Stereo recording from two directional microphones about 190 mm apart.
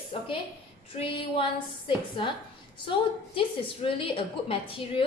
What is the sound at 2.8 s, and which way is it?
A woman's voice, 25° left (ahead or behind).